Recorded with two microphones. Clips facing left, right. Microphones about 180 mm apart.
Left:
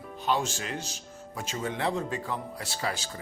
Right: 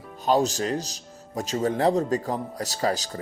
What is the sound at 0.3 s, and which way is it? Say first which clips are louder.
Speech: right 7 dB; 40° right (ahead or behind).